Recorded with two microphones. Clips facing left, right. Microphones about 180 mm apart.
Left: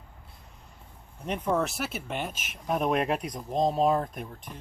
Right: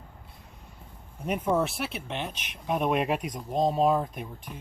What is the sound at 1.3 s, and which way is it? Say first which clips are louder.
Speech: right 1 dB; 5° right (ahead or behind).